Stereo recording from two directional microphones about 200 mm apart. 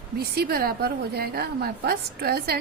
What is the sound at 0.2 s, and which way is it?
A woman's voice, 50° right (ahead or behind).